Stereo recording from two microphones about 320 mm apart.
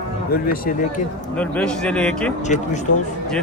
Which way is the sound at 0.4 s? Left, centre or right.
Left.